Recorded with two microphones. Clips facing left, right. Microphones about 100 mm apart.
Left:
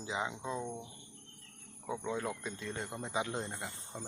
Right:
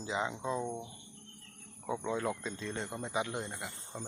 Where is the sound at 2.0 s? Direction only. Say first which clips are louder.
Right 2 dB; 5° left (ahead or behind).